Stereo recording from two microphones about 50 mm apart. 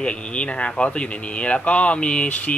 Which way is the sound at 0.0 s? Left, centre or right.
Left.